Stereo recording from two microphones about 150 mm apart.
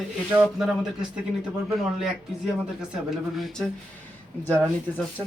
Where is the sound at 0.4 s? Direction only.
5° right (ahead or behind).